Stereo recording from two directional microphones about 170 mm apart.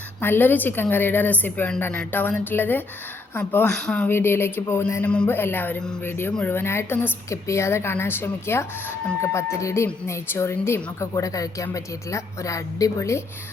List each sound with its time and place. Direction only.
0.2 s speech: 10° left (ahead or behind)